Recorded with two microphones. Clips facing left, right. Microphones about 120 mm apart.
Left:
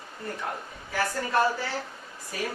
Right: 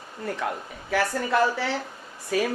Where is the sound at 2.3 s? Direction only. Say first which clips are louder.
Right 9 dB; 90° right.